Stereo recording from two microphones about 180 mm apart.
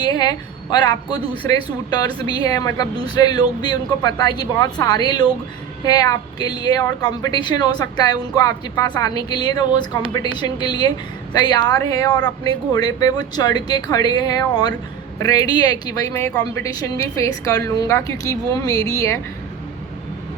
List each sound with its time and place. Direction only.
0.0 s a woman's voice: 20° left (ahead or behind)